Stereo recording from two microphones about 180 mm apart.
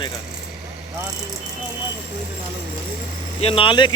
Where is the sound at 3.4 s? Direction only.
30° left (ahead or behind).